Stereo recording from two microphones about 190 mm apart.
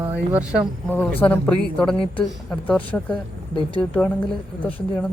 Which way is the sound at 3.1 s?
25° left (ahead or behind).